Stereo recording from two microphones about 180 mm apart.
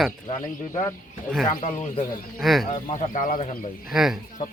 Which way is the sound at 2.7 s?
45° left (ahead or behind).